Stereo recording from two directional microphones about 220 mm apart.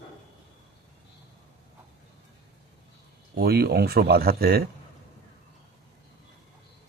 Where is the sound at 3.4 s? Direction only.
45° right (ahead or behind).